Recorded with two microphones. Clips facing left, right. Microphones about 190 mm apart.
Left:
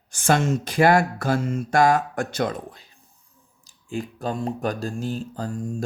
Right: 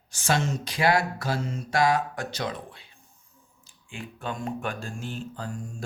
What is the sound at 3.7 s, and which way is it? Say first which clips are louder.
Speech: left 10 dB; 40° left (ahead or behind).